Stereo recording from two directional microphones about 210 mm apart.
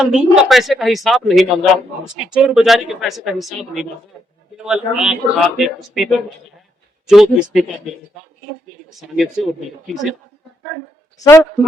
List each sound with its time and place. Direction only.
0.0 s speech: 5° right (ahead or behind)
9.0 s speech: centre (ahead or behind)
11.2 s a woman's voice: 15° left (ahead or behind)